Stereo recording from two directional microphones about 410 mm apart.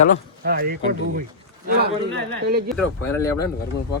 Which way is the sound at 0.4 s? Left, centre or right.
Right.